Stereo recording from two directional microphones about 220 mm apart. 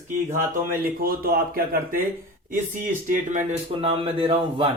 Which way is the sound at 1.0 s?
40° right (ahead or behind).